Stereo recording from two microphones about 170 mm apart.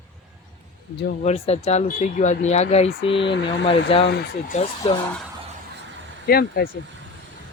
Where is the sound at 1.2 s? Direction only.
40° left (ahead or behind).